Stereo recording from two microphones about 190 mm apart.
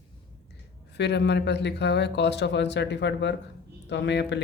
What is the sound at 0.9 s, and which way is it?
Speech, 65° left (ahead or behind).